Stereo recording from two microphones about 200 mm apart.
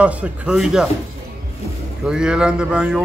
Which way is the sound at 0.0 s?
5° right (ahead or behind).